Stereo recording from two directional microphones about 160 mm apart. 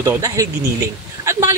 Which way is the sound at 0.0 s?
20° right (ahead or behind).